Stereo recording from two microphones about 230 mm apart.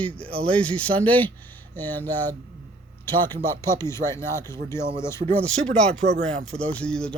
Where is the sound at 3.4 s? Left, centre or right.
Centre.